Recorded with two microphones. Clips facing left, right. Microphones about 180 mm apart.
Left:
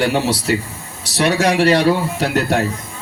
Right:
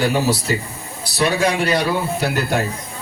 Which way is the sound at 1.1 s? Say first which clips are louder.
Left 3 dB; 75° left (ahead or behind).